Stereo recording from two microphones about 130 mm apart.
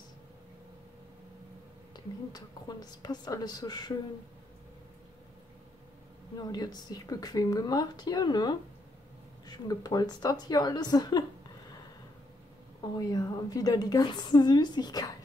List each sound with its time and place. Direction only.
2.3 s speech: 30° left (ahead or behind)
6.4 s speech: 30° left (ahead or behind)
12.9 s speech: 30° left (ahead or behind)